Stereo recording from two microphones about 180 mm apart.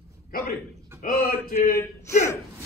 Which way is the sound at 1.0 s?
50° left (ahead or behind).